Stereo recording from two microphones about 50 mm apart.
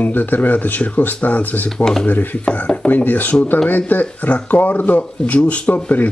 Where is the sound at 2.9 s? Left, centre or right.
Left.